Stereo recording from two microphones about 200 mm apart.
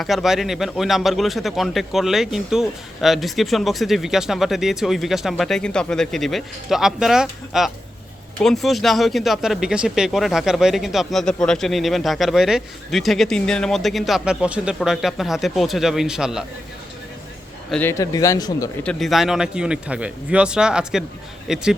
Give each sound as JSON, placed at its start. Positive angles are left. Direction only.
{"t": 0.0, "sound": "speech", "side_deg": 0}
{"t": 17.7, "sound": "a man's voice", "side_deg": 10}
{"t": 18.8, "sound": "speech", "side_deg": 5}